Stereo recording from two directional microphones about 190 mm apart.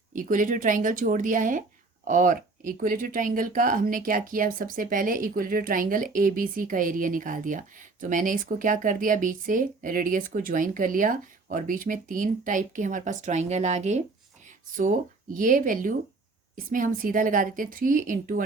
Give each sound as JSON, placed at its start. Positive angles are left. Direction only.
{"t": 0.1, "sound": "speech", "side_deg": -45}